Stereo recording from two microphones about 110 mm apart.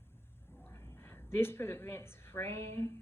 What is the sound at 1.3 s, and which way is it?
Speech, 20° left (ahead or behind).